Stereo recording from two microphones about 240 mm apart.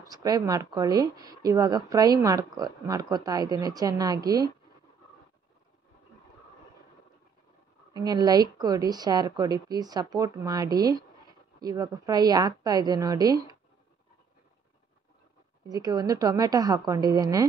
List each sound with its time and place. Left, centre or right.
0.1 s speech: centre
7.9 s speech: centre
15.7 s speech: centre